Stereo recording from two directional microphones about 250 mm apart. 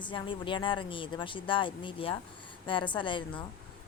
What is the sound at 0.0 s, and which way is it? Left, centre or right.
Speech, centre.